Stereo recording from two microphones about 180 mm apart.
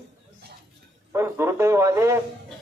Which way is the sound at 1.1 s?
15° right (ahead or behind).